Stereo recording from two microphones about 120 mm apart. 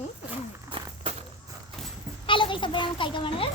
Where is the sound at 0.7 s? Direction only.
45° right (ahead or behind).